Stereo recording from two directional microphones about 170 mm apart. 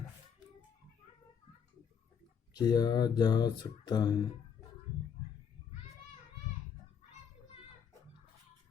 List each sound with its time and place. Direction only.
2.5 s speech: 25° left (ahead or behind)